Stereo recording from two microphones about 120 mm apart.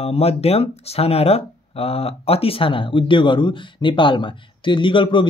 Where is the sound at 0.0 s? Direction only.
55° left (ahead or behind).